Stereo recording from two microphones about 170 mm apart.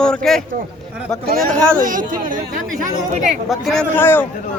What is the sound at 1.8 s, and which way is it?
Speech, 50° right (ahead or behind).